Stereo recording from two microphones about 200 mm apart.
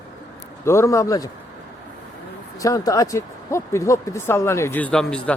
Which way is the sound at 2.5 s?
15° left (ahead or behind).